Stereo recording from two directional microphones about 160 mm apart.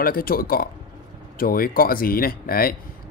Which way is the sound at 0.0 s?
65° left (ahead or behind).